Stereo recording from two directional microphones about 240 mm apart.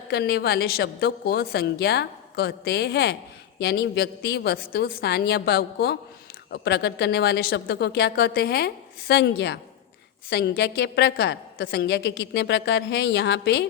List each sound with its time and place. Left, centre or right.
0.1 s a woman's voice: left